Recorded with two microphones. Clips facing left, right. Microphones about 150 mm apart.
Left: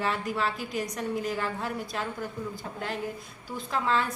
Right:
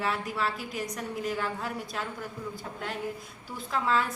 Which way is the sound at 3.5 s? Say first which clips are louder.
Even; centre (ahead or behind).